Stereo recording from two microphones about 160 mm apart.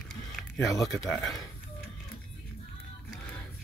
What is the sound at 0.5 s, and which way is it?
Speech, 20° left (ahead or behind).